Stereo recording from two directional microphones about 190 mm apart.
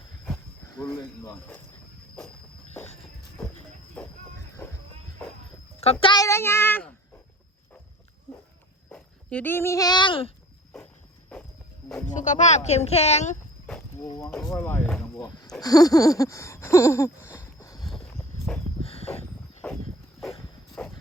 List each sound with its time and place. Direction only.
0.7 s speech: 20° left (ahead or behind)
2.8 s walk: 35° left (ahead or behind)
5.8 s a child's voice: 30° left (ahead or behind); by 6.9 s 10° left (ahead or behind)
8.9 s a child's voice: 10° left (ahead or behind); by 10.3 s 30° left (ahead or behind)
12.0 s speech: 40° left (ahead or behind)
14.5 s a child's voice: 10° left (ahead or behind)
15.6 s a sound: 20° left (ahead or behind)
18.3 s walk: 10° left (ahead or behind)
18.8 s a sound: 30° left (ahead or behind)
20.7 s a sound: 5° left (ahead or behind)